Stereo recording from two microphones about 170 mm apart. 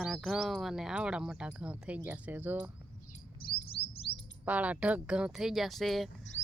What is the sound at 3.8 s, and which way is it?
Chirp, 30° left (ahead or behind).